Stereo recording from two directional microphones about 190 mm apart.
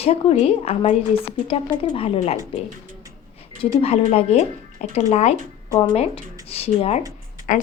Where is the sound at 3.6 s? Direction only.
30° left (ahead or behind).